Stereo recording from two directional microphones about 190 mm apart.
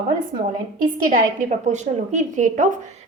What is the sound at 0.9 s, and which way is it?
A woman's voice, 45° right (ahead or behind).